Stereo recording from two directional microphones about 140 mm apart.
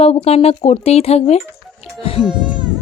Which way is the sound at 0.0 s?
45° left (ahead or behind).